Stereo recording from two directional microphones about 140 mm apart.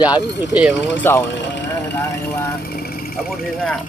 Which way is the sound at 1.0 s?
15° left (ahead or behind).